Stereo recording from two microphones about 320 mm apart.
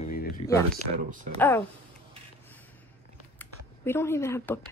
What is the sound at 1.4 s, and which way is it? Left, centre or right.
Speech, centre.